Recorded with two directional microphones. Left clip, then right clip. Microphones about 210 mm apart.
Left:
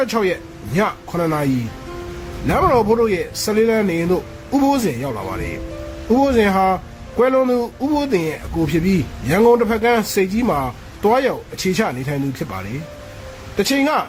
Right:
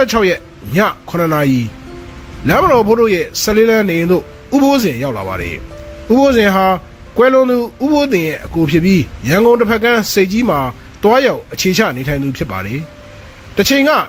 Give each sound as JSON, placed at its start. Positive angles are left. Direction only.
{"t": 0.0, "sound": "a man's voice", "side_deg": -20}
{"t": 2.5, "sound": "a man's voice", "side_deg": -20}